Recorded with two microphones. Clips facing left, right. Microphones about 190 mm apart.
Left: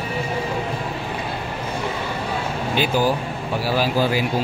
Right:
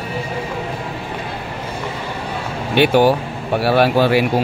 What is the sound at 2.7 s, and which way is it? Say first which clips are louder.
Speech: right 8 dB; 70° right (ahead or behind).